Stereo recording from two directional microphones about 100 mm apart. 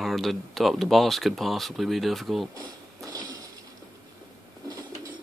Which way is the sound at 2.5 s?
40° right (ahead or behind).